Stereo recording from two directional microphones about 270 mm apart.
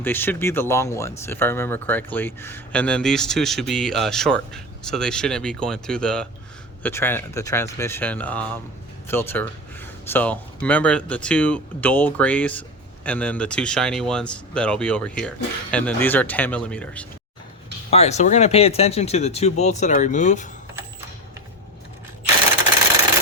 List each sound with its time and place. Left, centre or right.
0.0 s speech: centre
17.9 s speech: left